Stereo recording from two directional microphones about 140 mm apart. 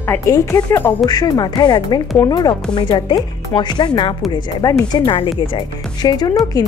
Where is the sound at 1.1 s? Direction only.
30° left (ahead or behind).